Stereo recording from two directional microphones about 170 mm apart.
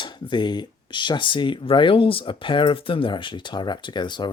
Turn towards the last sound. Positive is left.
turn(degrees=25)  # may be behind; listen again after turning